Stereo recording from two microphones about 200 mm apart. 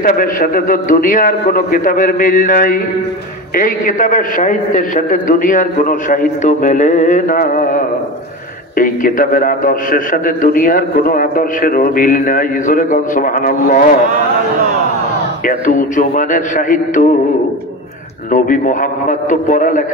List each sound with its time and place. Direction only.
0.0 s a man's voice: 45° left (ahead or behind)
15.4 s a man's voice: 40° left (ahead or behind)
18.3 s a man's voice: 40° left (ahead or behind)